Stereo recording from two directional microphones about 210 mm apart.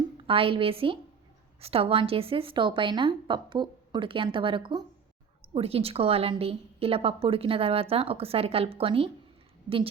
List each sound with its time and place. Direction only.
0.2 s a woman's voice: 25° right (ahead or behind)